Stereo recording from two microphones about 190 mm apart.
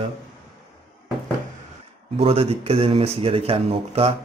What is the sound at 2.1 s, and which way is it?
Speech, 30° right (ahead or behind).